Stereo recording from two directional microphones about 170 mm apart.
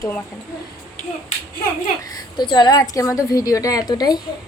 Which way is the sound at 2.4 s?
25° left (ahead or behind).